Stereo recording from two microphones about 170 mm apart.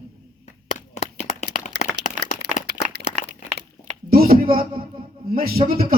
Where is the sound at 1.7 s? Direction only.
90° right.